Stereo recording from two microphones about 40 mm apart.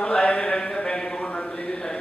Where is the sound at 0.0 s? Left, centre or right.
Left.